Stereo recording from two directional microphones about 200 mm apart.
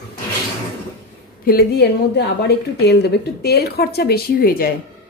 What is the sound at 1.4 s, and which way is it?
A woman's voice, 50° left (ahead or behind).